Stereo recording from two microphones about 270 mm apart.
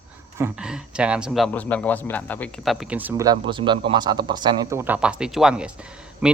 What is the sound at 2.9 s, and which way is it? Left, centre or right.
A man's voice, centre.